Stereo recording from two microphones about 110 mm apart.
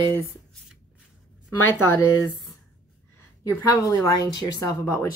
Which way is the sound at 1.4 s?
20° left (ahead or behind).